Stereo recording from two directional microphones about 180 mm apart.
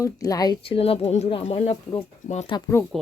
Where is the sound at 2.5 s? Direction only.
15° left (ahead or behind).